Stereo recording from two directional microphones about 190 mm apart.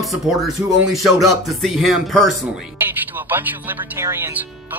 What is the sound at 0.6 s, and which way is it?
Speech, 20° right (ahead or behind).